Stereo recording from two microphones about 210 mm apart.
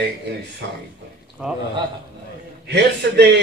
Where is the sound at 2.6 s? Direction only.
55° right (ahead or behind).